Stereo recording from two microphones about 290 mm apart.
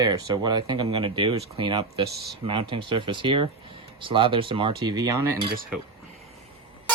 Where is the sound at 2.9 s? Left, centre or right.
Centre.